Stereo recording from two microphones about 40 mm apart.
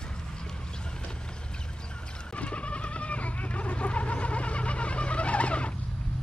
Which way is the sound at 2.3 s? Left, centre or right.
Left.